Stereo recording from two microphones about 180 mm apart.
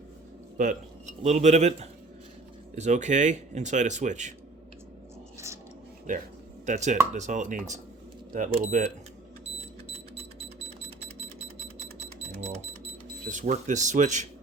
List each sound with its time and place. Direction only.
0.5 s speech: 45° right (ahead or behind)
6.7 s speech: 40° right (ahead or behind)
11.9 s a sound: 35° right (ahead or behind)
13.3 s speech: 45° right (ahead or behind)